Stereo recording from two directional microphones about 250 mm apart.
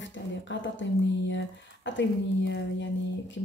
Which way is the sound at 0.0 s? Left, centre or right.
Left.